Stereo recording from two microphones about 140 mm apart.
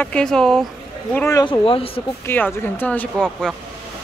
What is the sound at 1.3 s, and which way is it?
Speech, 25° left (ahead or behind).